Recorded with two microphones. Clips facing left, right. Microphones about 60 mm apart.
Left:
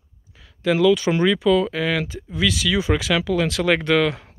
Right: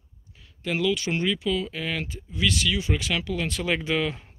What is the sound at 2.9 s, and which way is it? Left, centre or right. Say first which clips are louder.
Speech: left 7 dB; left.